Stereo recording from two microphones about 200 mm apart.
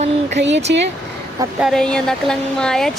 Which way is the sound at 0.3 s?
65° right (ahead or behind).